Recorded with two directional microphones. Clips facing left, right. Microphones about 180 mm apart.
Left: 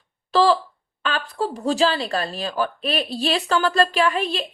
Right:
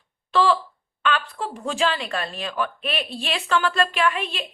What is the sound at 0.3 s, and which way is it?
A woman's voice, 35° left (ahead or behind).